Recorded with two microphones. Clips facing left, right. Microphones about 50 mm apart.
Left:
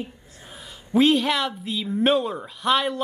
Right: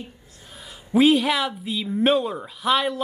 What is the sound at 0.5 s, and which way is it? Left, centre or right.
A man's voice, centre.